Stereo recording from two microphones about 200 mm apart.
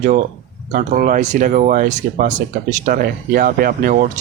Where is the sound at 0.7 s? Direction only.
40° right (ahead or behind).